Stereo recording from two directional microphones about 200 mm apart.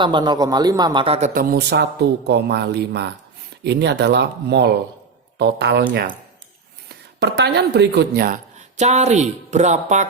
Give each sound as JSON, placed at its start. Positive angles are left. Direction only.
{"t": 0.0, "sound": "a man's voice", "side_deg": -25}
{"t": 6.8, "sound": "speech", "side_deg": -55}
{"t": 8.5, "sound": "speech", "side_deg": -35}